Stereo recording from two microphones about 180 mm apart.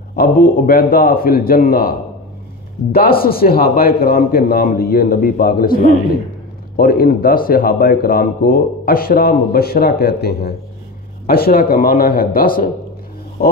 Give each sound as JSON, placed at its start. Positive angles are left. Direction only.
{"t": 0.1, "sound": "a man's voice", "side_deg": 55}